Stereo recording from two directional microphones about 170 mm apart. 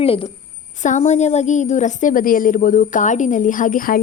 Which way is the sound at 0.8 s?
45° left (ahead or behind).